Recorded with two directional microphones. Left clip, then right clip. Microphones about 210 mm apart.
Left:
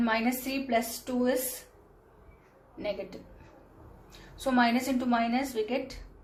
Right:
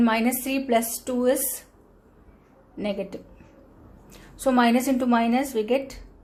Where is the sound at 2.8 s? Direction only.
55° right (ahead or behind).